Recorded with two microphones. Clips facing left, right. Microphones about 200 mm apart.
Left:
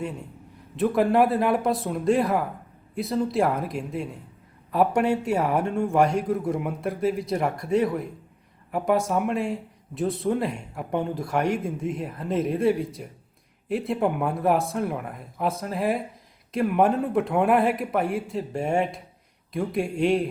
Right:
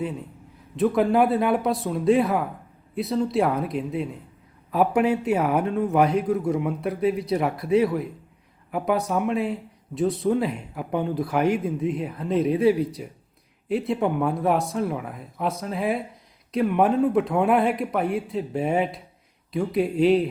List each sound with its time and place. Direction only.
0.0 s speech: centre (ahead or behind)